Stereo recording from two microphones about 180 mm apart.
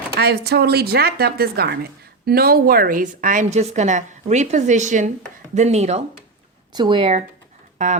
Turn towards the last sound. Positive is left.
turn(degrees=-45)  # may be behind; listen again after turning